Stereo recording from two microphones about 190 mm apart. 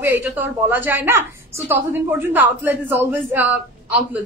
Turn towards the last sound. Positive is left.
turn(degrees=-10)  # may be behind; listen again after turning